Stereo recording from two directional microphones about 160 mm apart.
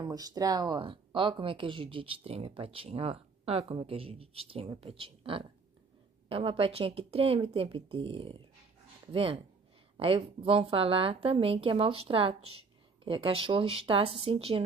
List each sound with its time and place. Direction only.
0.0 s speech: 25° right (ahead or behind)